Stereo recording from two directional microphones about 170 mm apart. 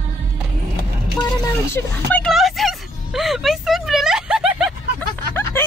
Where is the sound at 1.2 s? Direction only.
15° left (ahead or behind).